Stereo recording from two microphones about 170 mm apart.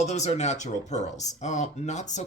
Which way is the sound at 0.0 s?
40° left (ahead or behind).